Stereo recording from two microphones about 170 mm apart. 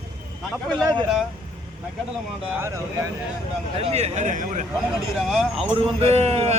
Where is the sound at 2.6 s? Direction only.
15° right (ahead or behind).